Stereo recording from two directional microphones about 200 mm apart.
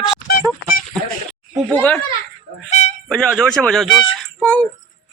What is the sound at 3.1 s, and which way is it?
Speech, 5° left (ahead or behind).